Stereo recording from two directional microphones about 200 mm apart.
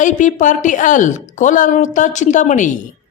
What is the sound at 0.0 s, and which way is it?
Speech, 40° left (ahead or behind).